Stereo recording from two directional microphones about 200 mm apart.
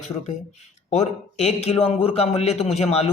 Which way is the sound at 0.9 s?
30° left (ahead or behind).